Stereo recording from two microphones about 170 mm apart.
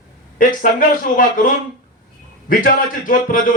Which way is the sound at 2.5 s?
55° left (ahead or behind).